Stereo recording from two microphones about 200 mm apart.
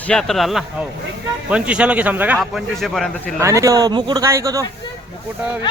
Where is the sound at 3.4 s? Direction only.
15° right (ahead or behind).